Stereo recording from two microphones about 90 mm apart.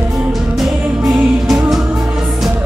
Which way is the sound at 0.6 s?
Centre (ahead or behind).